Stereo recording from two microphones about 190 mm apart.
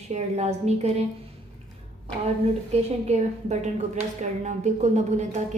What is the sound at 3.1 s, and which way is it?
A woman's voice, 35° right (ahead or behind).